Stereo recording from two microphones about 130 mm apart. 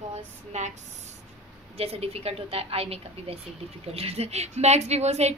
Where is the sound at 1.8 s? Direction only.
50° right (ahead or behind).